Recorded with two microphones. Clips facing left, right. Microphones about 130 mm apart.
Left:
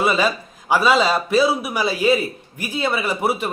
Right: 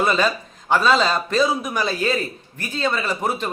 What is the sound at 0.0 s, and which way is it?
A man's voice, 5° left (ahead or behind).